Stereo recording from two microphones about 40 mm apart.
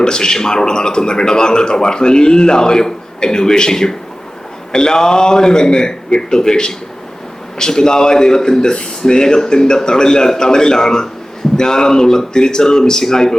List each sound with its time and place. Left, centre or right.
0.0 s a man's voice: centre